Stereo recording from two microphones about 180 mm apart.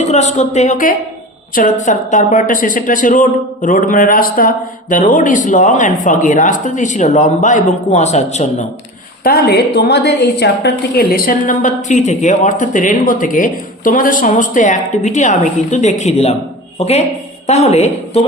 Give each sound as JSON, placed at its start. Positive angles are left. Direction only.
{"t": 0.0, "sound": "speech", "side_deg": 40}
{"t": 9.2, "sound": "a woman's voice", "side_deg": 60}